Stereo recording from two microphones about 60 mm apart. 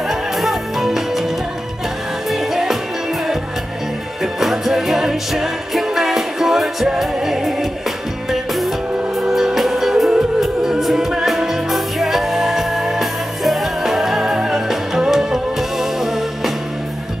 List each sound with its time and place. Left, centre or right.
0.1 s music: centre
2.3 s music: centre
4.2 s music: centre